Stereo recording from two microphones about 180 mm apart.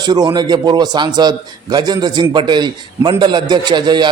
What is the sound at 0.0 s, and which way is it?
A man's voice, 25° right (ahead or behind).